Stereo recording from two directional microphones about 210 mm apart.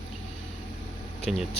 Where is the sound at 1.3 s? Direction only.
Centre (ahead or behind).